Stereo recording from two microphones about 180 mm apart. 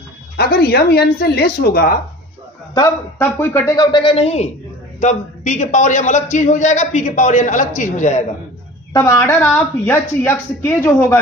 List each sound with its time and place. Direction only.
0.4 s speech: 60° left (ahead or behind)
2.7 s a man's voice: 15° left (ahead or behind); by 8.2 s 45° left (ahead or behind)
8.9 s a woman's voice: 20° left (ahead or behind)